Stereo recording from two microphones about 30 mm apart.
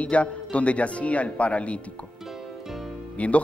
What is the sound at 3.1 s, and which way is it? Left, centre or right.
Speech, left.